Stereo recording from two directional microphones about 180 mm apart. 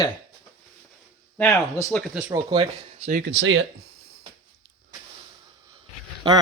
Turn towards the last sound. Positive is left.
turn(degrees=-25)  # may be behind; listen again after turning